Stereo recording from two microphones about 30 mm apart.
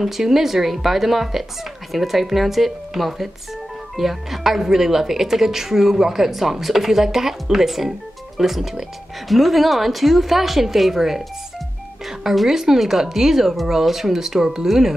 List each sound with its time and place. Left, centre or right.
0.0 s a woman's voice: centre
12.4 s speech: centre
13.5 s a woman's voice: centre